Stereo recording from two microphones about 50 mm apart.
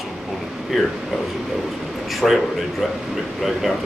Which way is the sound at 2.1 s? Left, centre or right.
Centre.